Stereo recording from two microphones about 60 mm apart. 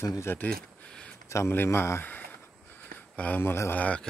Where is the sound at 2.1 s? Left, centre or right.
Left.